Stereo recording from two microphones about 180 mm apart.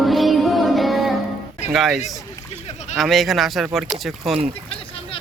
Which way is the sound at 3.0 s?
Centre (ahead or behind).